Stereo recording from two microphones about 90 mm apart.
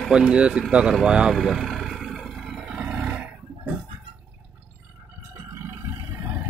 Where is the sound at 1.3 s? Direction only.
Centre (ahead or behind).